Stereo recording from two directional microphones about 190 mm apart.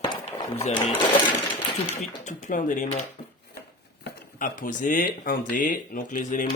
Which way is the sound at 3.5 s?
60° left (ahead or behind).